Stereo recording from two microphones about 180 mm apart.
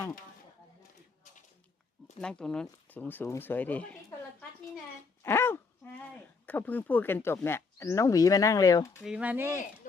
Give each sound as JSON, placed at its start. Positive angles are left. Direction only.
{"t": 2.2, "sound": "speech", "side_deg": 5}
{"t": 5.2, "sound": "a sound", "side_deg": 15}
{"t": 6.4, "sound": "speech", "side_deg": 10}
{"t": 9.0, "sound": "speech", "side_deg": -5}